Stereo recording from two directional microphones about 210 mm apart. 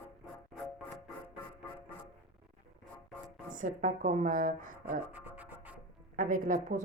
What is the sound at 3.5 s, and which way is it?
Speech, 40° right (ahead or behind).